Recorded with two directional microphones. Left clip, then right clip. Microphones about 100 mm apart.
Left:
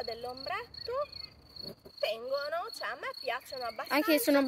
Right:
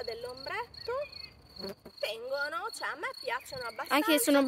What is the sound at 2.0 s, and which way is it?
Speech, 40° right (ahead or behind).